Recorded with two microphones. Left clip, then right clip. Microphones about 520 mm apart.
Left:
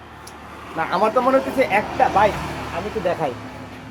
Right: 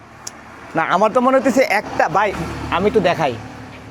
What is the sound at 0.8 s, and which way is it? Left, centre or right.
Speech, right.